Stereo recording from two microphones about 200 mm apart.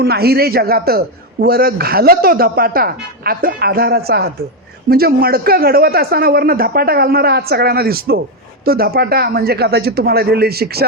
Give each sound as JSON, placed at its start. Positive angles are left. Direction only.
{"t": 0.0, "sound": "a man's voice", "side_deg": -50}